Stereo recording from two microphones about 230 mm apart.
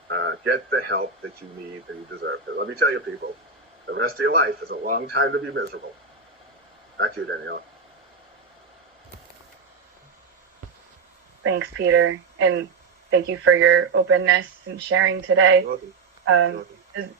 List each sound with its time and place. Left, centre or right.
0.1 s speech: right
2.2 s a man's voice: right
6.9 s speech: right
11.4 s speech: right